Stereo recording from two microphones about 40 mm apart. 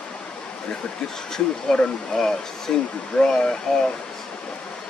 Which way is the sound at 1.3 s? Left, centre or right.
Centre.